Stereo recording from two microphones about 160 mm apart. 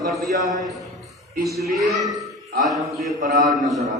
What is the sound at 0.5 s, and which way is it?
Speech, 20° left (ahead or behind).